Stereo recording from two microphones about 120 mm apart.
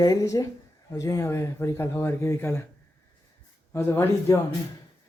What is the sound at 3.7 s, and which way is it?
Speech, 20° left (ahead or behind).